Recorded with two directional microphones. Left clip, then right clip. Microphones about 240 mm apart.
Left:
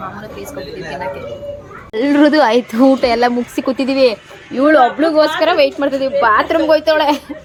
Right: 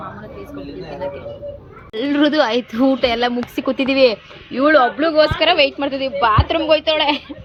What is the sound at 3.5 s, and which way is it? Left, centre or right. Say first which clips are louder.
Speech: left 2 dB; centre.